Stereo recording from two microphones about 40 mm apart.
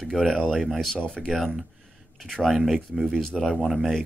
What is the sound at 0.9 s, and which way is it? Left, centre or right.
Speech, centre.